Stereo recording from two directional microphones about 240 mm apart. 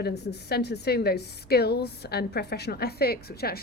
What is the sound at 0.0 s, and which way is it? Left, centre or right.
A woman's voice, left.